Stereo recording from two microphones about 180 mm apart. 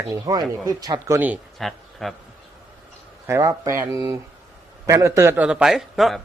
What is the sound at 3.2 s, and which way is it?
Speech, 15° right (ahead or behind).